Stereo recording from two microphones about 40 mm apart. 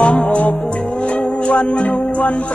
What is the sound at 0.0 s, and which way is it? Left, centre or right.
Music, left.